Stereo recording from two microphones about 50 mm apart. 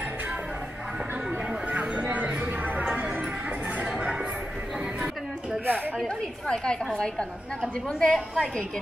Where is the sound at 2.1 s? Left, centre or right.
Right.